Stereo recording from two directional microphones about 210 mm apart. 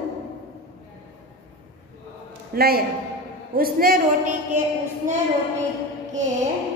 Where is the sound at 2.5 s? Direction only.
45° right (ahead or behind).